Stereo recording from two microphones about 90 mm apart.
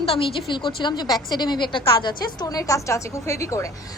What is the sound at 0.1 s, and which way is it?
A woman's voice, 75° left (ahead or behind).